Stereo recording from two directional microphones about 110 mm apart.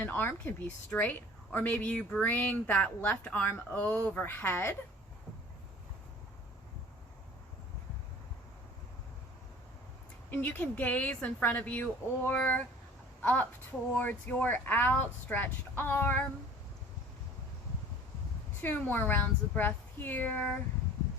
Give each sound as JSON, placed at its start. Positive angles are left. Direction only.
{"t": 0.0, "sound": "a woman's voice", "side_deg": 20}
{"t": 10.3, "sound": "a woman's voice", "side_deg": 15}
{"t": 18.6, "sound": "a woman's voice", "side_deg": 15}